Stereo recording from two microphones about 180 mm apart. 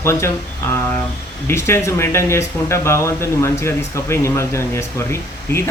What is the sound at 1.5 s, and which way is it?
Speech, 15° left (ahead or behind).